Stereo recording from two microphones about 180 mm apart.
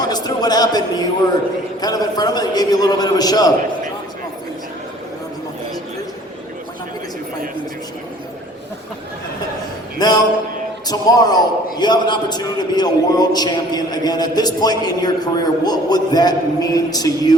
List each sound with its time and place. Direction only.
0.0 s a sound: 20° left (ahead or behind)
1.8 s a man's voice: 20° left (ahead or behind)
10.0 s a man's voice: 20° left (ahead or behind)